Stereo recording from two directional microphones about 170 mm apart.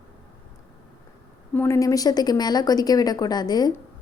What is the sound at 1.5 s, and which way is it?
A woman's voice, 15° left (ahead or behind).